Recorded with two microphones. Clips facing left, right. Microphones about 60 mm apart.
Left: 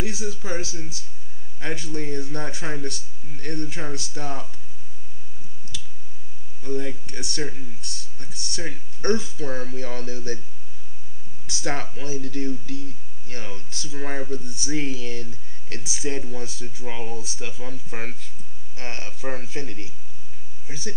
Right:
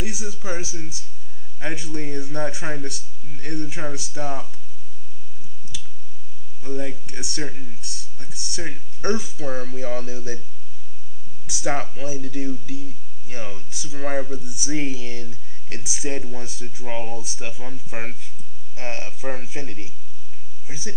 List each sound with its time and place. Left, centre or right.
0.0 s speech: centre
6.6 s speech: centre
11.4 s a sound: centre
11.9 s speech: centre